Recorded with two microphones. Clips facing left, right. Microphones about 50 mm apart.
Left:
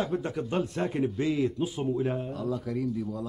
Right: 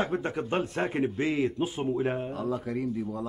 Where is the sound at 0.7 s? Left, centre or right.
Right.